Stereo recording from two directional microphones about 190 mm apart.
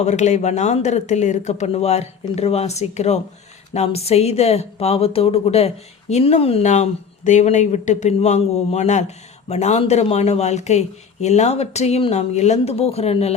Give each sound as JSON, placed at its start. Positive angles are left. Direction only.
{"t": 0.0, "sound": "a woman's voice", "side_deg": 40}